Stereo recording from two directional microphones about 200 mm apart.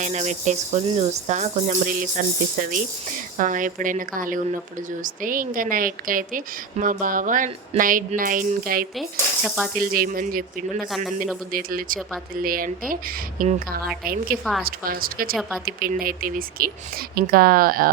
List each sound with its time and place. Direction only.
0.0 s a woman's voice: 35° right (ahead or behind)
9.0 s speech: centre (ahead or behind)
9.7 s a woman's voice: 45° right (ahead or behind)
10.8 s speech: centre (ahead or behind)
11.5 s a woman's voice: 45° right (ahead or behind)
15.4 s speech: 5° right (ahead or behind)
15.6 s a woman's voice: 45° right (ahead or behind)